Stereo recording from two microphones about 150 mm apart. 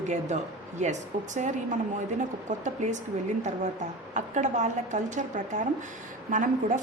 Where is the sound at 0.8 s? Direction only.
50° right (ahead or behind).